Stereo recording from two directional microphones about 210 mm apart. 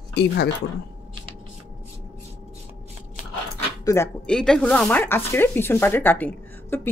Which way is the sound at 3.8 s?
15° left (ahead or behind).